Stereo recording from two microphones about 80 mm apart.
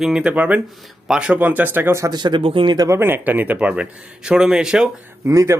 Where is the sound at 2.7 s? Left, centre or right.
Right.